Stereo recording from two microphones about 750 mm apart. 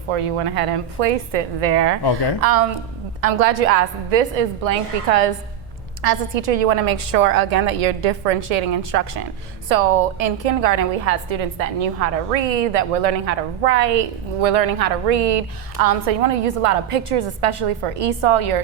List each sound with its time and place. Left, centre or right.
0.1 s a woman's voice: right